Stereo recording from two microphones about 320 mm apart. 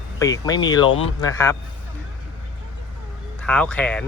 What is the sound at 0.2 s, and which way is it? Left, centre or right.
Speech, centre.